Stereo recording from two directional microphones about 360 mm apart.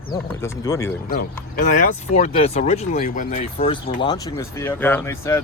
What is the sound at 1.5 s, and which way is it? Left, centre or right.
Speech, left.